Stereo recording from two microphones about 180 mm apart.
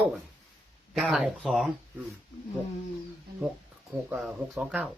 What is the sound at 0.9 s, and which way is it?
Speech, centre (ahead or behind).